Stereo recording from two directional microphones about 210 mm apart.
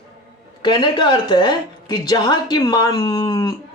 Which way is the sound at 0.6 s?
20° left (ahead or behind).